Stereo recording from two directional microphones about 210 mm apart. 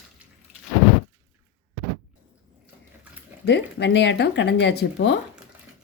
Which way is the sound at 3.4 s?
55° left (ahead or behind).